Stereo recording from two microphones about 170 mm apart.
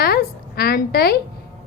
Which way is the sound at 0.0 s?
65° left (ahead or behind).